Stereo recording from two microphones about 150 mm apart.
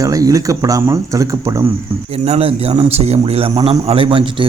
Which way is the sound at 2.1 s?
45° right (ahead or behind).